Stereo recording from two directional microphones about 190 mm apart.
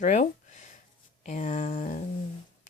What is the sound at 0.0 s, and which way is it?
Speech, 40° left (ahead or behind).